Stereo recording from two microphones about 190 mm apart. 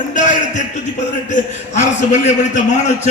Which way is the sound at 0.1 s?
40° left (ahead or behind).